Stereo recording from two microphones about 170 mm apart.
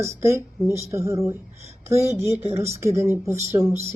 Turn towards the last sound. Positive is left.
turn(degrees=-20)  # may be behind; listen again after turning